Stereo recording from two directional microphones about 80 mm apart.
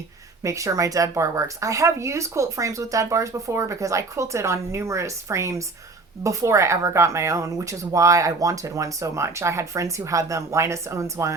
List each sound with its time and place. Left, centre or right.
0.4 s speech: right